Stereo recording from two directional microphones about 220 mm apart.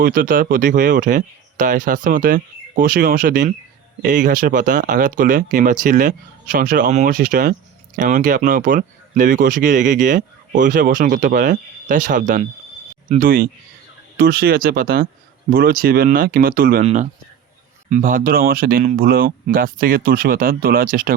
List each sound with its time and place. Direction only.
0.0 s speech: 40° right (ahead or behind)
16.8 s speech: 30° right (ahead or behind)